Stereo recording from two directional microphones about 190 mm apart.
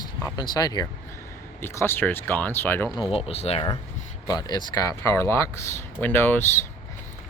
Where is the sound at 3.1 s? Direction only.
30° left (ahead or behind); by 6.4 s 10° left (ahead or behind).